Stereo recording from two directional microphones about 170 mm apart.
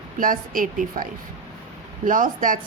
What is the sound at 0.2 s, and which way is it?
Speech, 55° right (ahead or behind).